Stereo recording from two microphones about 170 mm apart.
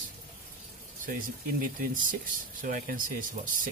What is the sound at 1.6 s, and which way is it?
Speech, 55° right (ahead or behind).